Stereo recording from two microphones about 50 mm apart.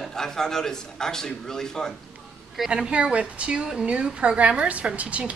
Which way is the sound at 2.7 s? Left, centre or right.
Right.